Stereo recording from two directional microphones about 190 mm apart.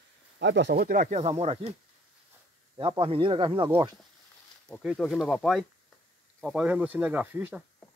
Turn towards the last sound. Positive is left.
turn(degrees=-10)  # may be behind; listen again after turning